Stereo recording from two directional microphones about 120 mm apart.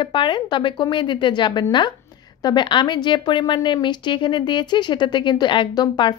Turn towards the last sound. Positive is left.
turn(degrees=40)  # may be behind; listen again after turning